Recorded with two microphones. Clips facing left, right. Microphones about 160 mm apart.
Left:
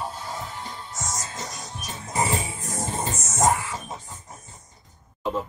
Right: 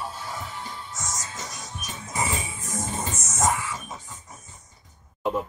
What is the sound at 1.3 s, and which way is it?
Music, 30° left (ahead or behind).